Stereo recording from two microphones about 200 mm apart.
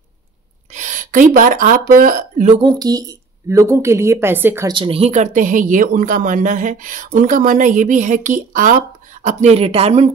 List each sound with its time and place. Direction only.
0.7 s speech: 40° right (ahead or behind)
2.6 s speech: 20° right (ahead or behind)
4.7 s speech: 25° right (ahead or behind)